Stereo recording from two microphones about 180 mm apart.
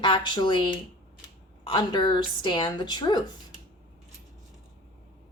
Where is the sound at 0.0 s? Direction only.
25° left (ahead or behind).